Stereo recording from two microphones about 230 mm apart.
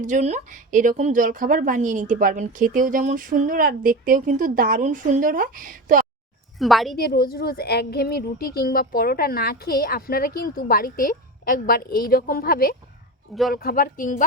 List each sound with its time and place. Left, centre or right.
0.0 s a woman's voice: right
6.6 s a woman's voice: centre
6.9 s a woman's voice: left